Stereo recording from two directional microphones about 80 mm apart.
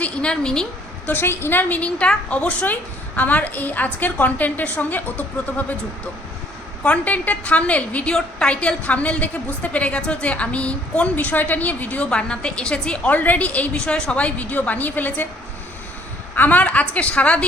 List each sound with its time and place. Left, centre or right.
0.0 s a woman's voice: centre
1.0 s a woman's voice: left
6.8 s a woman's voice: centre
16.3 s a woman's voice: left